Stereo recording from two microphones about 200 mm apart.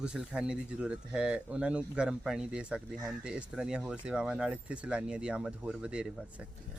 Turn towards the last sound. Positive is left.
turn(degrees=-5)  # may be behind; listen again after turning